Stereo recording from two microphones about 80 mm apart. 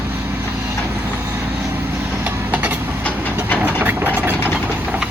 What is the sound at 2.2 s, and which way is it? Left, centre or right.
Vehicle, right.